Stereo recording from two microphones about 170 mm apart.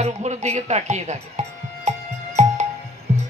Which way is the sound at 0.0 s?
40° right (ahead or behind).